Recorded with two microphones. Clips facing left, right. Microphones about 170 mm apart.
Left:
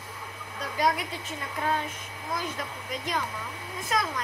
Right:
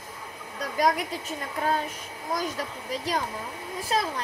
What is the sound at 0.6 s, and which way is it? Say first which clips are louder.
A child's voice: right 2 dB; 40° right (ahead or behind).